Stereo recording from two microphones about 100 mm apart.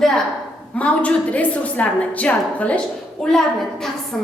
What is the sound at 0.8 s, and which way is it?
A woman's voice, 15° left (ahead or behind).